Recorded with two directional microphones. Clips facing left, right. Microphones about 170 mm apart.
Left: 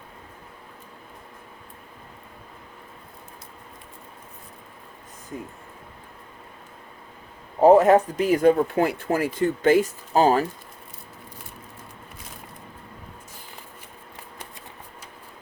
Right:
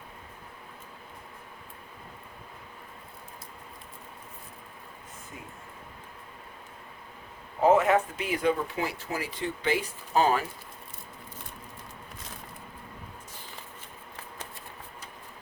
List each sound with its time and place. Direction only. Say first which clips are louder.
7.6 s speech: left 7 dB; 35° left (ahead or behind)
10.1 s speech: left 5 dB; 35° left (ahead or behind)